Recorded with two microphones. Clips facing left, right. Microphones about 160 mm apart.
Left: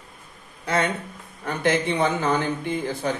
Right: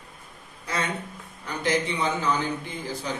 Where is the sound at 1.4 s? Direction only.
55° left (ahead or behind).